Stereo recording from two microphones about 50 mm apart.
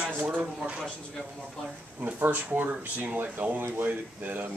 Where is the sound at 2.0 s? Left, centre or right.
Right.